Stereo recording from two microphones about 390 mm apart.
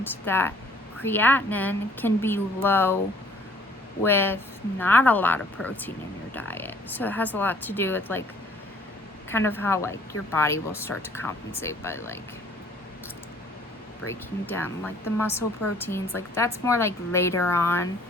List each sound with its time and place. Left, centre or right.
0.0 s speech: centre
4.0 s speech: centre
9.3 s a woman's voice: centre
14.4 s a woman's voice: centre